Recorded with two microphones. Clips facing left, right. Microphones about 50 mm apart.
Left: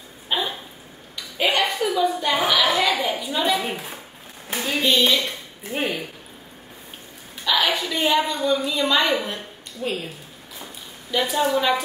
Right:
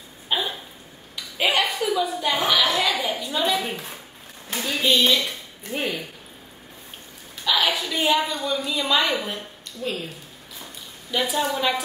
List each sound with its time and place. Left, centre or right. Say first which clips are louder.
0.3 s a sound: left 1 dB; centre
3.6 s a woman's voice: left 2 dB; centre
4.5 s a sound: left 2 dB; centre
4.8 s speech: even; centre
7.4 s a woman's voice: left 1 dB; centre
9.8 s speech: left 2 dB; centre
11.1 s speech: left 2 dB; centre